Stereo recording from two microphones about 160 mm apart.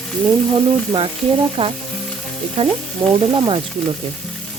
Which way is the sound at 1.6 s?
35° right (ahead or behind).